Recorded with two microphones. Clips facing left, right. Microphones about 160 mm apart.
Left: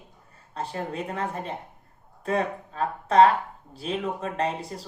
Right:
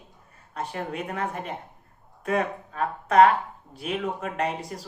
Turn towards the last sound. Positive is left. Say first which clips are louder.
# even
turn(degrees=30)  # may be behind; listen again after turning